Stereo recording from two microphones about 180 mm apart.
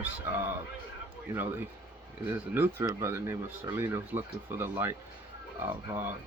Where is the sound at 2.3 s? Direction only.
10° right (ahead or behind).